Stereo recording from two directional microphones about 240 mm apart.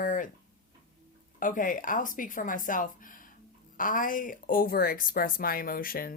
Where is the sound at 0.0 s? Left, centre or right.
Left.